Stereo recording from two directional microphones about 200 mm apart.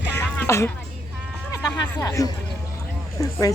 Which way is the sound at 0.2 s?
15° left (ahead or behind).